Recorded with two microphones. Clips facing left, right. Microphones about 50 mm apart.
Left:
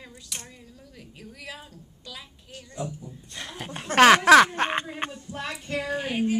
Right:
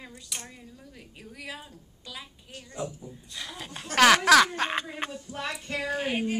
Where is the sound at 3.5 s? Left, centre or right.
Left.